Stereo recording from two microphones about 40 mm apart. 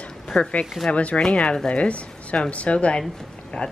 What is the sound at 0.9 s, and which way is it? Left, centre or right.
A woman's voice, left.